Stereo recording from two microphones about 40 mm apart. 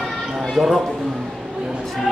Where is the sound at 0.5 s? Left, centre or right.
Centre.